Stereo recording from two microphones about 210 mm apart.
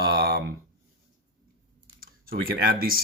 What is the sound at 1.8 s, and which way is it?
Typing, 45° right (ahead or behind).